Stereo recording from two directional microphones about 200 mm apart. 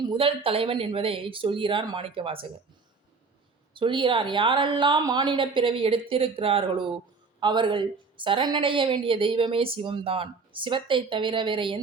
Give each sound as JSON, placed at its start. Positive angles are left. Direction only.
{"t": 0.0, "sound": "a woman's voice", "side_deg": -25}
{"t": 3.8, "sound": "a woman's voice", "side_deg": -25}